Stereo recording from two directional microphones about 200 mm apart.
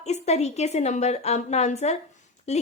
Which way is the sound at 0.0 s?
35° left (ahead or behind).